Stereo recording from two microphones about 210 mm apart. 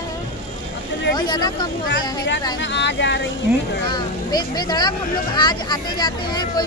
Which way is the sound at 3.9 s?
20° left (ahead or behind).